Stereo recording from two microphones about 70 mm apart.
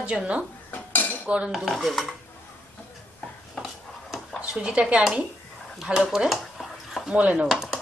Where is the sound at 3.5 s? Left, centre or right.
Centre.